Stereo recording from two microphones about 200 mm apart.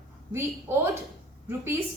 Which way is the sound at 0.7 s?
15° right (ahead or behind).